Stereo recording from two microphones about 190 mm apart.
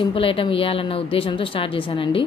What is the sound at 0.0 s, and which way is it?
A woman's voice, 30° left (ahead or behind).